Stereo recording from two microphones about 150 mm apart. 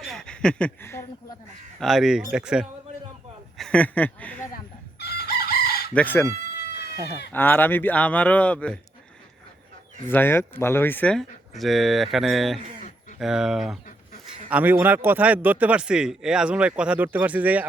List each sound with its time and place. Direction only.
0.0 s a sound: 5° left (ahead or behind)
1.8 s speech: centre (ahead or behind)
3.6 s speech: 10° left (ahead or behind)
4.9 s chicken: 90° left
5.9 s speech: 10° left (ahead or behind)
6.3 s chicken: 90° left
7.3 s speech: 15° left (ahead or behind)
10.1 s a man's voice: 15° left (ahead or behind); by 17.7 s 10° right (ahead or behind)